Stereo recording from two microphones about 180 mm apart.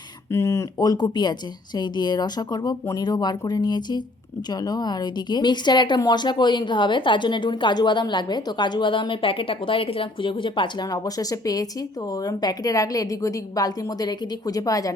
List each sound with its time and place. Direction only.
0.3 s a woman's voice: 15° left (ahead or behind)